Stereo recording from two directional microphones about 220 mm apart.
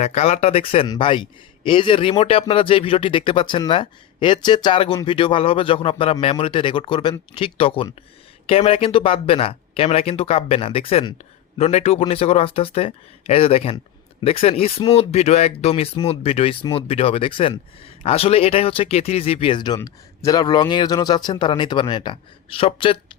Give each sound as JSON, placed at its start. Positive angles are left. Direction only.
{"t": 0.0, "sound": "speech", "side_deg": 30}